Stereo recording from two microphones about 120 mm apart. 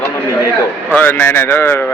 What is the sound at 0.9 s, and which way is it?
Speech, 15° left (ahead or behind).